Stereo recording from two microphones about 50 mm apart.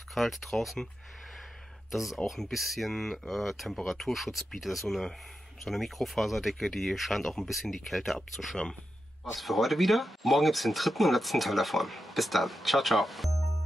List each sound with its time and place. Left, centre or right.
0.1 s speech: centre
1.9 s speech: centre